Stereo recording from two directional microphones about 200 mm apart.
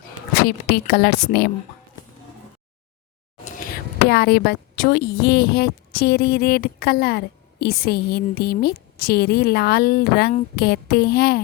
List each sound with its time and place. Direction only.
0.3 s speech: 50° left (ahead or behind)
4.1 s speech: 50° left (ahead or behind)